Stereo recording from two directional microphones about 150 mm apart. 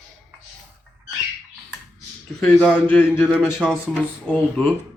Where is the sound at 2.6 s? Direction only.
10° left (ahead or behind).